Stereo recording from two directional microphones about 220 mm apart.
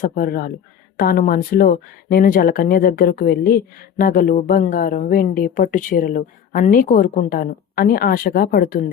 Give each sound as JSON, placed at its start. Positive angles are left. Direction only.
{"t": 0.0, "sound": "speech", "side_deg": 40}